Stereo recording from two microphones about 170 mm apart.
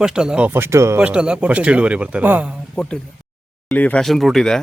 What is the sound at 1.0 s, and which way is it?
A man's voice, 5° right (ahead or behind).